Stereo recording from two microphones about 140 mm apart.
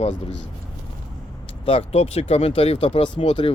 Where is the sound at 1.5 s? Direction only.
45° left (ahead or behind).